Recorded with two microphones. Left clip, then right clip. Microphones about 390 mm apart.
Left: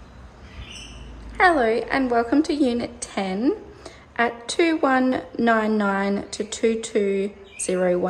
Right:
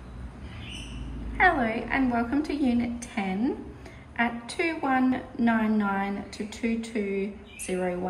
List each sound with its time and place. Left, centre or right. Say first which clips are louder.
1.4 s a woman's voice: left 5 dB; centre